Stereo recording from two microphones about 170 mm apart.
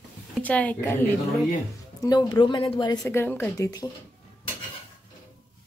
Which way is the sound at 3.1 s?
15° left (ahead or behind).